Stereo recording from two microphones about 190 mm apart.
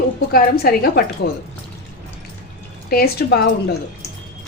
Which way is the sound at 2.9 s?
55° left (ahead or behind).